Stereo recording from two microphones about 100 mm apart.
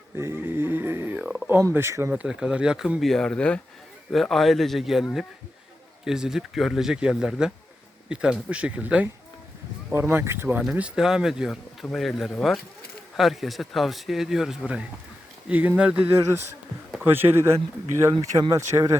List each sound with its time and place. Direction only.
0.2 s dog: 25° right (ahead or behind)
1.2 s a sound: 10° right (ahead or behind)
1.7 s speech: 25° right (ahead or behind)
2.1 s speech: 5° right (ahead or behind); by 10.6 s 25° right (ahead or behind)
10.6 s speech: 10° right (ahead or behind)
18.2 s speech: 35° right (ahead or behind)